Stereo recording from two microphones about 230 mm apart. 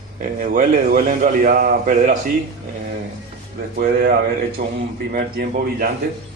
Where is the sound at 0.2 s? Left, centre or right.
Right.